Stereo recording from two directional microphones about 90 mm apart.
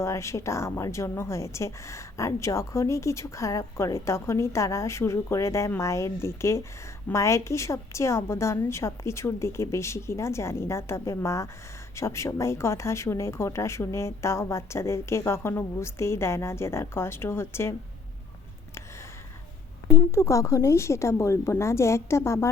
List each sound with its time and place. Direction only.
0.0 s a woman's voice: 35° left (ahead or behind)
19.9 s a woman's voice: 30° left (ahead or behind)